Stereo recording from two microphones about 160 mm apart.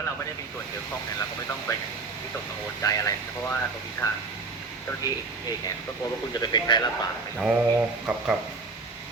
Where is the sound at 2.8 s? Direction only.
20° left (ahead or behind).